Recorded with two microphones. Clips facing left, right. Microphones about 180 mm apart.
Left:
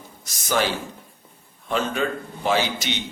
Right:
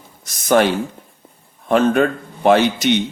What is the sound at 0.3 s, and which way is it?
Speech, 55° right (ahead or behind).